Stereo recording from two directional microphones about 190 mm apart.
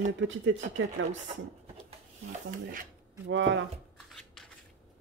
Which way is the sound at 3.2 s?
80° right.